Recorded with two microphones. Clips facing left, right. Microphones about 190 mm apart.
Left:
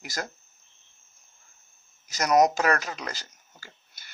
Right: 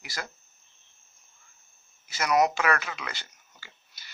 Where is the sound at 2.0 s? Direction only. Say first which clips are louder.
Left 3 dB; 40° left (ahead or behind).